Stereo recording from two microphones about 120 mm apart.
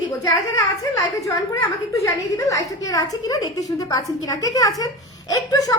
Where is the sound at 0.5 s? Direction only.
30° left (ahead or behind).